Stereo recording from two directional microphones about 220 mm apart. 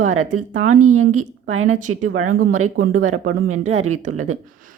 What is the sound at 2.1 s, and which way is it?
Speech, 70° right (ahead or behind).